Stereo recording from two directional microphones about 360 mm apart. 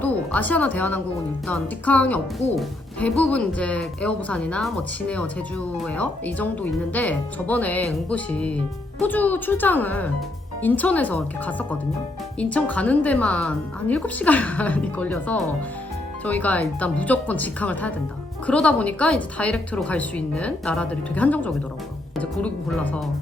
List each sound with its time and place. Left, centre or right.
0.0 s a woman's voice: centre